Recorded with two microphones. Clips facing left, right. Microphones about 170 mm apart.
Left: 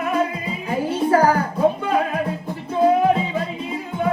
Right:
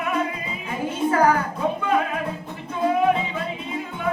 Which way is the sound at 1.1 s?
35° left (ahead or behind).